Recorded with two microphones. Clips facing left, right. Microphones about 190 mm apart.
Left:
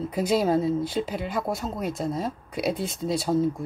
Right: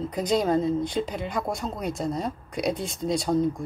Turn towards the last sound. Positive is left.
turn(degrees=5)  # may be behind; listen again after turning